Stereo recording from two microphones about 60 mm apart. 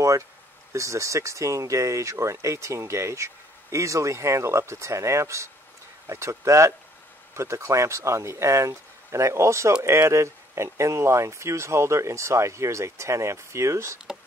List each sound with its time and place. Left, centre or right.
0.7 s speech: right